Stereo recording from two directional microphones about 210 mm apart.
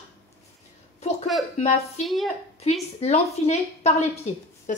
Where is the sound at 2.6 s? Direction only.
30° left (ahead or behind).